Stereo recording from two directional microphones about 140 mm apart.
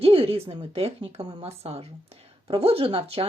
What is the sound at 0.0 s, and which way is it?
A woman's voice, 40° right (ahead or behind).